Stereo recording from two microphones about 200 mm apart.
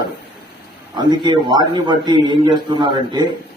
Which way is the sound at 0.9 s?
20° right (ahead or behind).